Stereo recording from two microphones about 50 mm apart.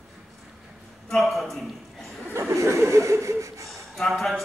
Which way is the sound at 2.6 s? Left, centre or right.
Right.